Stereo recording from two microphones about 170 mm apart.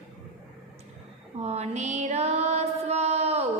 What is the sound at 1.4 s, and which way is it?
Music, 40° right (ahead or behind).